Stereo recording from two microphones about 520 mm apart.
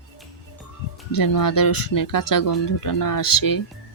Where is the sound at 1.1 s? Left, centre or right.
Left.